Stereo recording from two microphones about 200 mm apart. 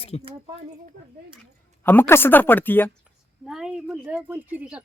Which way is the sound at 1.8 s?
10° left (ahead or behind).